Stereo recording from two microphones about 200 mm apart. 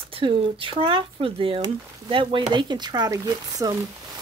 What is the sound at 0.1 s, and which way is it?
Speech, 25° right (ahead or behind).